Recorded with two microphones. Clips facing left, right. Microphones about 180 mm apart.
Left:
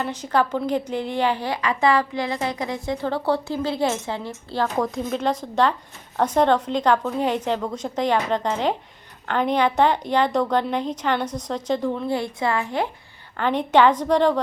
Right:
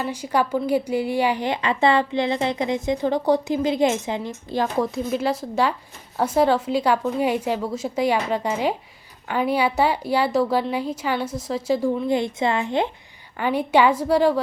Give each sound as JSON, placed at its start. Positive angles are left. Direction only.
{"t": 0.0, "sound": "a woman's voice", "side_deg": -10}
{"t": 13.3, "sound": "a woman's voice", "side_deg": -10}